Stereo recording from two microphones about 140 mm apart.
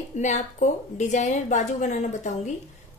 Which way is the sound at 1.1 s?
60° left (ahead or behind).